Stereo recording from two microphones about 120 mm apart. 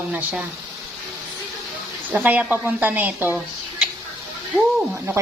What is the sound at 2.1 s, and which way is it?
Speech, 15° right (ahead or behind).